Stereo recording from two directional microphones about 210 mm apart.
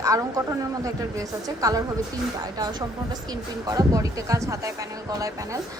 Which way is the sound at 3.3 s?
15° right (ahead or behind).